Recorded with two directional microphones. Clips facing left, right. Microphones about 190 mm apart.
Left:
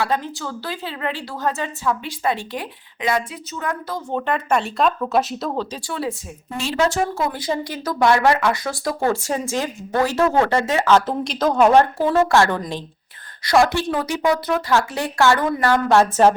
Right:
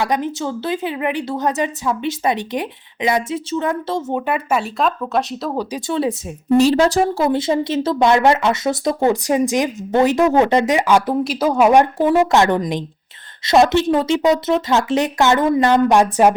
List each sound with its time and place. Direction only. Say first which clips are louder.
0.0 s speech: right 3 dB; 15° right (ahead or behind)
4.1 s speech: left 1 dB; 10° right (ahead or behind)
5.5 s speech: right 5 dB; 15° right (ahead or behind)
6.6 s speech: right 6 dB; 35° right (ahead or behind); by 16.3 s 15° right (ahead or behind)